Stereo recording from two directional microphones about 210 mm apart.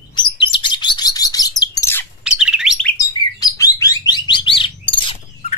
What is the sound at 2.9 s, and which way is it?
Chirp, 15° left (ahead or behind).